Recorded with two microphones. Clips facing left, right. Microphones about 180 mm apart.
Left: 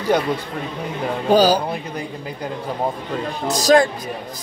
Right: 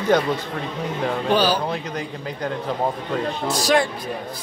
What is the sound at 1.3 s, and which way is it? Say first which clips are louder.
Speech: left 6 dB; 40° left (ahead or behind).